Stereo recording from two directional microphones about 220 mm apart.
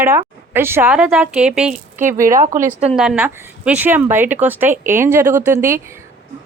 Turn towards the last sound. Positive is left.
turn(degrees=-10)  # may be behind; listen again after turning